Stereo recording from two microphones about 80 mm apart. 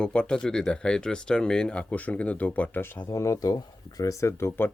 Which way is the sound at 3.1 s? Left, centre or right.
Left.